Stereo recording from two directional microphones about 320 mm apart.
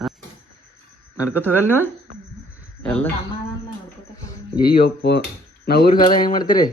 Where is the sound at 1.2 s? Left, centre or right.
Centre.